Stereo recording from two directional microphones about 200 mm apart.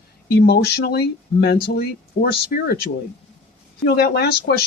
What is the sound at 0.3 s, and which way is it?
Speech, 55° left (ahead or behind).